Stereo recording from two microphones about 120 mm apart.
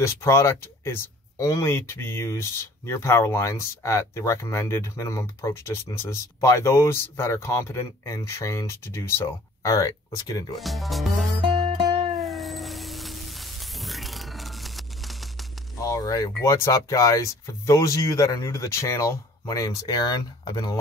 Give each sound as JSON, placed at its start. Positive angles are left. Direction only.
{"t": 0.0, "sound": "speech", "side_deg": 25}
{"t": 10.6, "sound": "speech", "side_deg": 0}
{"t": 11.5, "sound": "music", "side_deg": -55}
{"t": 12.2, "sound": "cat", "side_deg": 0}
{"t": 15.8, "sound": "speech", "side_deg": 30}